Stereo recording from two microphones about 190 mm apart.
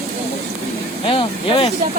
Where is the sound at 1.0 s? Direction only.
25° left (ahead or behind).